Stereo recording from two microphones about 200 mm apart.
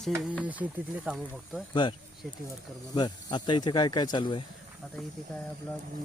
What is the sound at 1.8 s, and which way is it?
Speech, 20° left (ahead or behind).